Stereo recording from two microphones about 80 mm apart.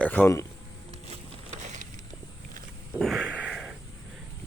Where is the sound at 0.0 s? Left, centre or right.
Centre.